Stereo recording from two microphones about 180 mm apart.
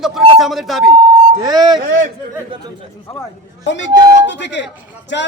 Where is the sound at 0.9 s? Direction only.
20° right (ahead or behind).